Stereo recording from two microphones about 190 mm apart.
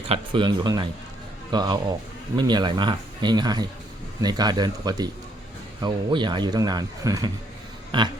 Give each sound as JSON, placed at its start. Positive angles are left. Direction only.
{"t": 0.1, "sound": "speech", "side_deg": -25}